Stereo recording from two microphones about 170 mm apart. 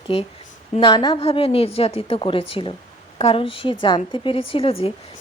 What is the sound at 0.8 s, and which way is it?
A woman's voice, 25° left (ahead or behind).